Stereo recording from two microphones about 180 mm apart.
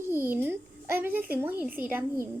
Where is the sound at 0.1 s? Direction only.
10° right (ahead or behind).